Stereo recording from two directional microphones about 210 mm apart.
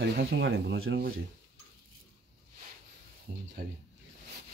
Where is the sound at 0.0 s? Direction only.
55° right (ahead or behind).